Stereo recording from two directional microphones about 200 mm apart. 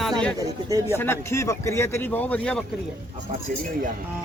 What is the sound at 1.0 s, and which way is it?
Speech, 15° left (ahead or behind).